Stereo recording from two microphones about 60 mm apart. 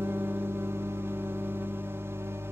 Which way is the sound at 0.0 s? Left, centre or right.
Right.